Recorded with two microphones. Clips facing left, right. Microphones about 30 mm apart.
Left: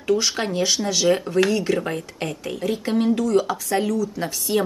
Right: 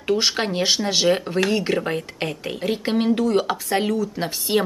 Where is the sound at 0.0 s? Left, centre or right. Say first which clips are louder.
Even; right.